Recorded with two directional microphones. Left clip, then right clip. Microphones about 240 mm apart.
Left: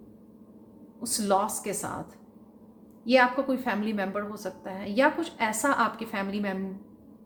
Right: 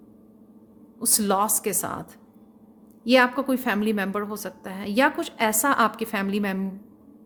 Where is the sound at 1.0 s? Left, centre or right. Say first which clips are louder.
Right 3 dB; right.